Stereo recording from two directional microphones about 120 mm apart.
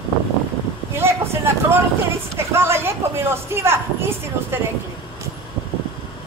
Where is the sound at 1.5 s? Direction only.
20° right (ahead or behind).